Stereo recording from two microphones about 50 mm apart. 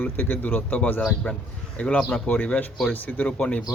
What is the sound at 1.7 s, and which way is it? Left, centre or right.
Speech, left.